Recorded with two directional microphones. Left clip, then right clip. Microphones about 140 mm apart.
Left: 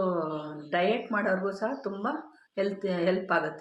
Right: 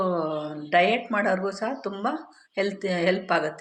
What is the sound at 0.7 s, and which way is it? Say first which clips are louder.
Speech: right 6 dB; 15° right (ahead or behind).